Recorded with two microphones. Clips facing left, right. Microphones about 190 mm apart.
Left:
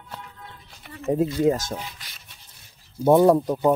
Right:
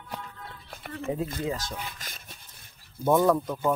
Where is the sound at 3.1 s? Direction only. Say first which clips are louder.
Left 6 dB; 35° left (ahead or behind).